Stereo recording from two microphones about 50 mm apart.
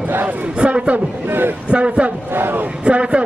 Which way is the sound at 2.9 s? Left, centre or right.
Right.